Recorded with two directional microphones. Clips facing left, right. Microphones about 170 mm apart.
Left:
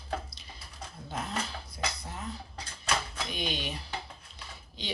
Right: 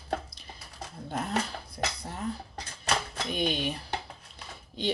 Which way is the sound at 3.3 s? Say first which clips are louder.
Right 6 dB; 50° right (ahead or behind).